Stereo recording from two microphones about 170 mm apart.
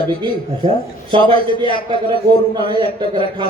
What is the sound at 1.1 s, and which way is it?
Speech, 30° right (ahead or behind).